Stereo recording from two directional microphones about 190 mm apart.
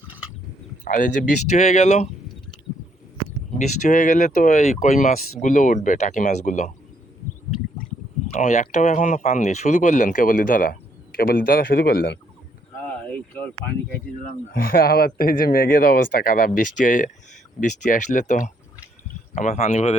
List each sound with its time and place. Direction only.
0.9 s speech: 45° left (ahead or behind)
3.6 s speech: 40° left (ahead or behind)
8.4 s speech: 40° left (ahead or behind)
13.1 s a sound: 10° left (ahead or behind)
14.5 s speech: 50° left (ahead or behind)